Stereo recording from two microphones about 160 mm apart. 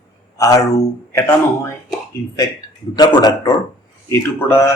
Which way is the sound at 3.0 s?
25° left (ahead or behind).